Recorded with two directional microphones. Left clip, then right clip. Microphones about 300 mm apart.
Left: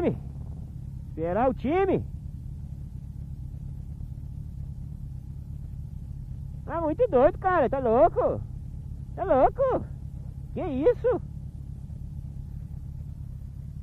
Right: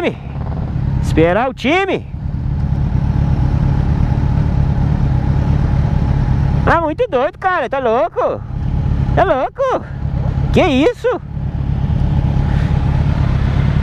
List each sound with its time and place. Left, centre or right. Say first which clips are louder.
1.1 s speech: right 12 dB; centre
6.6 s speech: right 12 dB; centre